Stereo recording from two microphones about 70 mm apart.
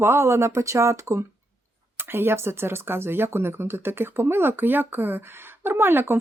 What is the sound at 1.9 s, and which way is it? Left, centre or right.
Speech, right.